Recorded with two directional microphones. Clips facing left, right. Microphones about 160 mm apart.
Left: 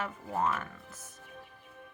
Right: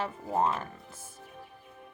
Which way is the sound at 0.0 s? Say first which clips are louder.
Right 3 dB; 30° right (ahead or behind).